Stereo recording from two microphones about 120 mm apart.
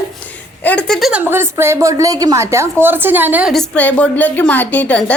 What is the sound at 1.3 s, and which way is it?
A woman's voice, 20° right (ahead or behind).